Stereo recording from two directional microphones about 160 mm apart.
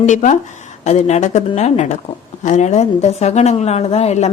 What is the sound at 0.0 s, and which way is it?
A woman's voice, 50° left (ahead or behind).